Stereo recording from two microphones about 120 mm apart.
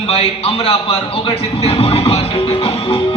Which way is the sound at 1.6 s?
55° left (ahead or behind).